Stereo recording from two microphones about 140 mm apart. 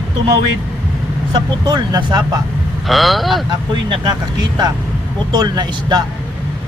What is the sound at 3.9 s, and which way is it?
Speech, 30° right (ahead or behind).